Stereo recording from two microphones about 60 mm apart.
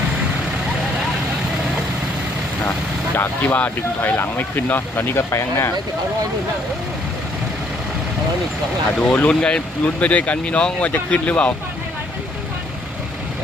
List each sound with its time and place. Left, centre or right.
3.2 s speech: left
5.3 s speech: left
9.0 s speech: left